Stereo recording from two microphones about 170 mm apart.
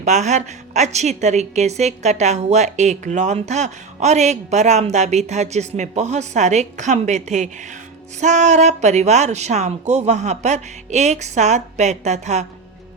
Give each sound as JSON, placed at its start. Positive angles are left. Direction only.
{"t": 0.0, "sound": "a woman's voice", "side_deg": -45}